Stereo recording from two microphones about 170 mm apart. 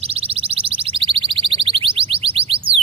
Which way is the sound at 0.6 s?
30° right (ahead or behind).